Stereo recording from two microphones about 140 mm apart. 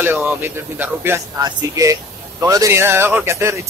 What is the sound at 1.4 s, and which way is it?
Speech, 25° right (ahead or behind).